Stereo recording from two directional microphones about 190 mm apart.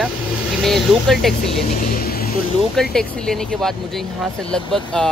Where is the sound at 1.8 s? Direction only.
50° left (ahead or behind).